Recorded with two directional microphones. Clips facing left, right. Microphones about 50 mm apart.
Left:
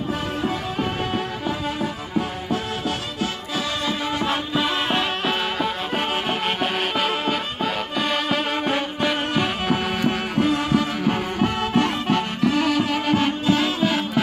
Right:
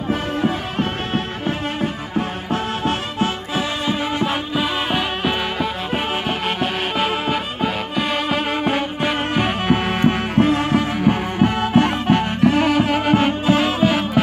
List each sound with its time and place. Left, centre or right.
0.1 s music: right
4.2 s music: centre
9.3 s music: right
11.1 s music: right